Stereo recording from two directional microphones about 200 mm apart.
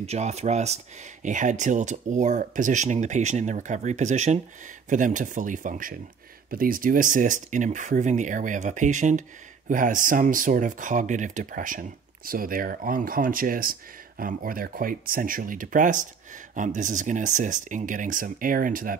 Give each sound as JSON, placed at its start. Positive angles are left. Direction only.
{"t": 0.0, "sound": "speech", "side_deg": -30}